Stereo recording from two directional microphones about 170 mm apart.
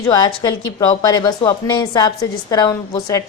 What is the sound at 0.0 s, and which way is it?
A woman's voice, 25° left (ahead or behind).